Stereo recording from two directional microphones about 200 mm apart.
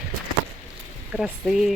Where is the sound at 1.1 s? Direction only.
Centre (ahead or behind).